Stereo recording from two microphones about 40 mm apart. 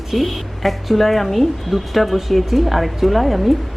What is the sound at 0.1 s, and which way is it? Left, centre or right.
Speech, centre.